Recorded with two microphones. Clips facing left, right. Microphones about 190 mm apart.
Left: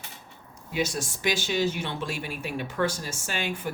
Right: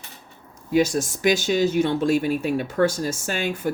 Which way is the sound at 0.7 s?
45° right (ahead or behind).